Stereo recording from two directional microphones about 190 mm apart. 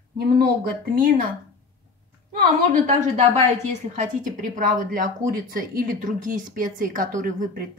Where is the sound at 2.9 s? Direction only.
40° right (ahead or behind).